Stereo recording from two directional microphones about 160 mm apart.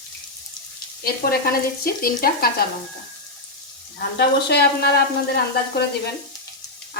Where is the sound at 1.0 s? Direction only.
70° left (ahead or behind).